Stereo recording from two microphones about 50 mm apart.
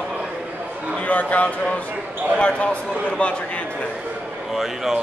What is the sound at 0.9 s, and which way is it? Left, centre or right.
A man's voice, left.